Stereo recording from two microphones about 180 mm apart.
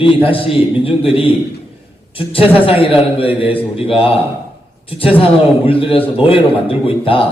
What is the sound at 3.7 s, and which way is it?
A man's voice, 30° left (ahead or behind).